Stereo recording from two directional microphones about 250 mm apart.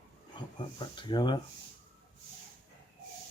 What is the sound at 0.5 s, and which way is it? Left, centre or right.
Speech, centre.